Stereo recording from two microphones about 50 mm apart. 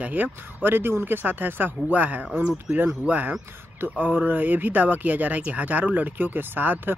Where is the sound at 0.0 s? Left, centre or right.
Right.